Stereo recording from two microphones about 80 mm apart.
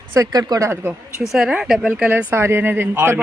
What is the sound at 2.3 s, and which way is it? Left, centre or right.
Speech, right.